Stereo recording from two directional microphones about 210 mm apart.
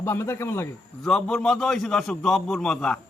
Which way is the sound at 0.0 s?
10° left (ahead or behind).